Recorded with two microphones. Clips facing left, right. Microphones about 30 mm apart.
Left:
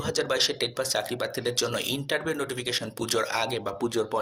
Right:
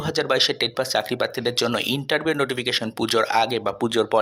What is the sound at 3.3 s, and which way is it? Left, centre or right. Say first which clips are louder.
Speech: right 8 dB; right.